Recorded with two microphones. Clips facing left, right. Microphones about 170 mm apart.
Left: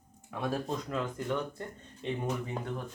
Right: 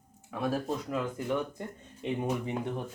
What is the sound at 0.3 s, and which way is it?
Speech, 5° right (ahead or behind).